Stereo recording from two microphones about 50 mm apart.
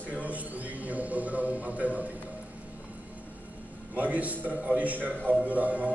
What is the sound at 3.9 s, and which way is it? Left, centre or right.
A man's voice, right.